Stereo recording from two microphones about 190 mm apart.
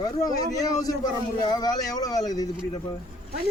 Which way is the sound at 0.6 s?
20° left (ahead or behind).